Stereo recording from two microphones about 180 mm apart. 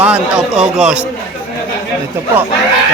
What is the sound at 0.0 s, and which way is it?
Speech, 5° right (ahead or behind).